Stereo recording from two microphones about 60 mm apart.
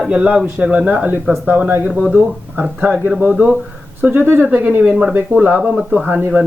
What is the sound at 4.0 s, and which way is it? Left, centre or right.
Speech, right.